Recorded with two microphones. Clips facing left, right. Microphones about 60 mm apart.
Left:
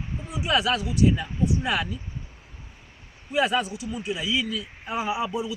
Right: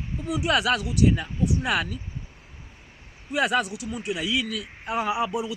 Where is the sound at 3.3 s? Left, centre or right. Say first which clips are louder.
Even; right.